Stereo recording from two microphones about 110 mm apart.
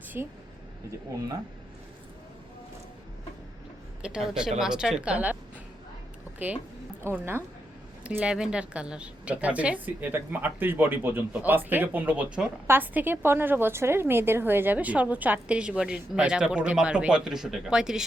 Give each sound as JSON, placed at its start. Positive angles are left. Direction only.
{"t": 0.1, "sound": "a woman's voice", "side_deg": -20}
{"t": 4.0, "sound": "a woman's voice", "side_deg": -5}
{"t": 7.0, "sound": "a woman's voice", "side_deg": -20}
{"t": 8.0, "sound": "a woman's voice", "side_deg": -10}